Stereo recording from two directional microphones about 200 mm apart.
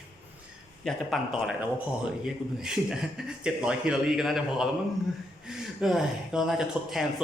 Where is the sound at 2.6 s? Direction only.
5° right (ahead or behind).